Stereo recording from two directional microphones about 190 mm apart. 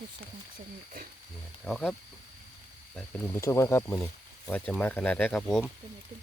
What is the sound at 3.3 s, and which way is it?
Speech, 15° left (ahead or behind).